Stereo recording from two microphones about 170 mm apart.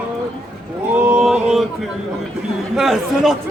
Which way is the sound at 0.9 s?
10° right (ahead or behind).